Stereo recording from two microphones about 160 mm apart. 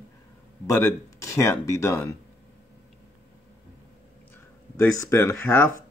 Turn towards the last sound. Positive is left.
turn(degrees=15)  # may be behind; listen again after turning